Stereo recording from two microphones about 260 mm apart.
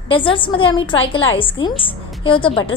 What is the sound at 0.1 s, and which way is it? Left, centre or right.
A woman's voice, centre.